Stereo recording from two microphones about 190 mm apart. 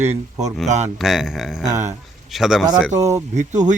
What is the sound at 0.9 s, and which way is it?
Speech, centre (ahead or behind).